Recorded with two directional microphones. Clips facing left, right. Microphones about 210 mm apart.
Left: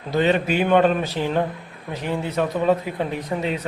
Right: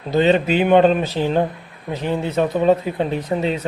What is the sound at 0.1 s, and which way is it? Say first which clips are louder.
Speech: right 4 dB; 25° right (ahead or behind).